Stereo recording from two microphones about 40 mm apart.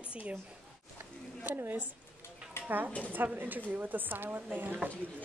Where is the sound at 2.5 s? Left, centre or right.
Left.